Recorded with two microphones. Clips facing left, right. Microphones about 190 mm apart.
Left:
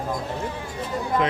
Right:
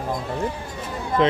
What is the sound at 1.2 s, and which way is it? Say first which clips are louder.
Speech: right 6 dB; 30° right (ahead or behind).